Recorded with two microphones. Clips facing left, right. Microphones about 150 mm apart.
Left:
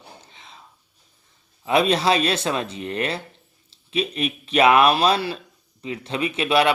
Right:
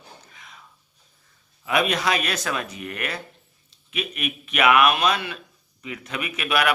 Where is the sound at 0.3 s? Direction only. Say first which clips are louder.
Left 2 dB; 30° left (ahead or behind).